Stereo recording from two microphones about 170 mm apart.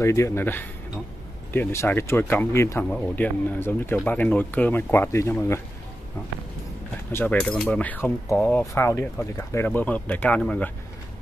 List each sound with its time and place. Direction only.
0.0 s speech: 15° left (ahead or behind)
7.1 s speech: 10° left (ahead or behind)